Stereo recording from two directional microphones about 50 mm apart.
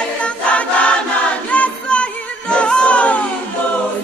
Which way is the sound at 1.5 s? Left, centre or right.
Left.